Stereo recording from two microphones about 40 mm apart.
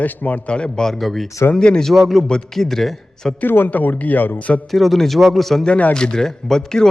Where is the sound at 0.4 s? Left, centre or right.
Left.